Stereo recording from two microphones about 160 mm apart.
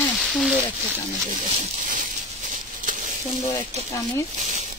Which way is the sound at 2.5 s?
55° right (ahead or behind).